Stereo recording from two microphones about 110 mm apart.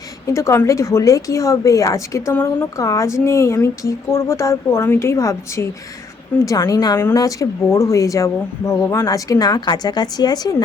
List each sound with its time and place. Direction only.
0.3 s speech: 30° left (ahead or behind)